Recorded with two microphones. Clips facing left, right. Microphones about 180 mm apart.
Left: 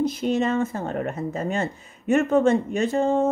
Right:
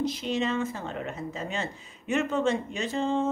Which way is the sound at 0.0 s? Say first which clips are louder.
Left 6 dB; 50° left (ahead or behind).